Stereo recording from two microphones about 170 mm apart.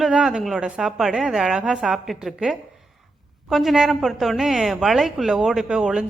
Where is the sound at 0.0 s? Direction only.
5° right (ahead or behind).